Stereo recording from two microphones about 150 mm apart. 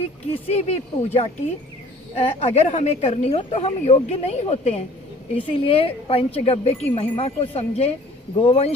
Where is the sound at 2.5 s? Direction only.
50° left (ahead or behind).